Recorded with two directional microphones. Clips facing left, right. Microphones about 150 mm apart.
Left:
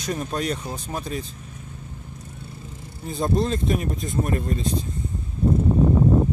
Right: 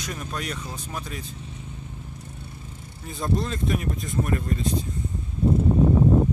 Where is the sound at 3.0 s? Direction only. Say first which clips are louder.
Left 4 dB; 30° left (ahead or behind).